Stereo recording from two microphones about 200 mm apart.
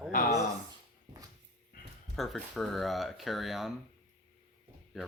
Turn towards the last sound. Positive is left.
turn(degrees=0)  # may be behind; listen again after turning